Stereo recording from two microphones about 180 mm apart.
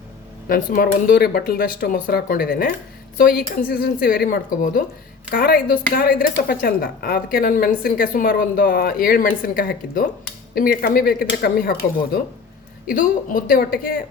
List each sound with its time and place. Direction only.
0.4 s a woman's voice: 55° left (ahead or behind)